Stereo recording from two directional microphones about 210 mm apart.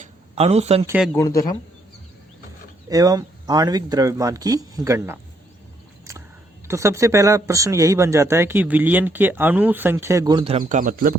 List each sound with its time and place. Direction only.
0.0 s a sound: 30° right (ahead or behind)
0.9 s speech: 5° right (ahead or behind)
1.1 s speech: 15° left (ahead or behind)
2.9 s speech: 15° right (ahead or behind)
6.7 s speech: 15° right (ahead or behind); by 11.1 s 40° right (ahead or behind)